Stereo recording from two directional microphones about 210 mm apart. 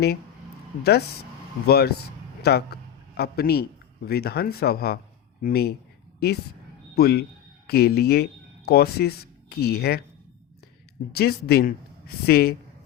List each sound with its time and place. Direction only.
1.6 s a man's voice: 50° left (ahead or behind)
11.1 s a man's voice: 45° left (ahead or behind)